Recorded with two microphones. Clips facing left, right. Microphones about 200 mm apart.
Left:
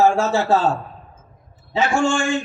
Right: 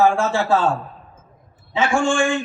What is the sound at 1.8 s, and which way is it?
Speech, 55° right (ahead or behind).